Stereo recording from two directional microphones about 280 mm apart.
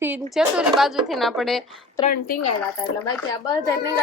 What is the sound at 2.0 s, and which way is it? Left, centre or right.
Speech, left.